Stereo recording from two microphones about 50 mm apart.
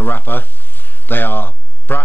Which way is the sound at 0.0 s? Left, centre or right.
Left.